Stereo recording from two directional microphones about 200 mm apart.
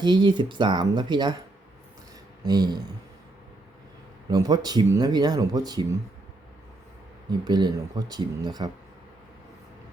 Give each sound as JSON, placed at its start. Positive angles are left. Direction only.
{"t": 0.0, "sound": "speech", "side_deg": -20}
{"t": 2.4, "sound": "speech", "side_deg": -20}
{"t": 4.3, "sound": "speech", "side_deg": -20}
{"t": 7.3, "sound": "speech", "side_deg": -20}